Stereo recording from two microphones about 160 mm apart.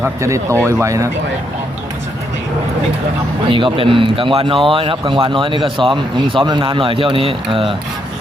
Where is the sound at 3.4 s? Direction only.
30° right (ahead or behind).